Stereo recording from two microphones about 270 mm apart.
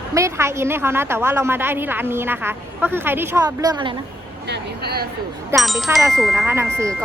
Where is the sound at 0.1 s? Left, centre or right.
Centre.